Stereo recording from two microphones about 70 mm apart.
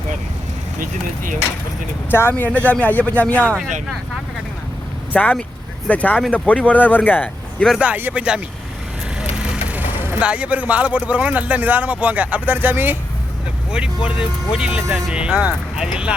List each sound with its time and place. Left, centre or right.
2.0 s speech: left
2.5 s speech: centre
5.1 s speech: left
8.1 s speech: centre
9.6 s vehicle: right
10.2 s a man's voice: centre
13.7 s speech: centre
15.1 s speech: centre